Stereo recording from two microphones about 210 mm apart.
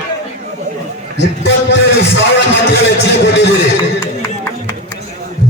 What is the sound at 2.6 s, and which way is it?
Speech, 55° left (ahead or behind).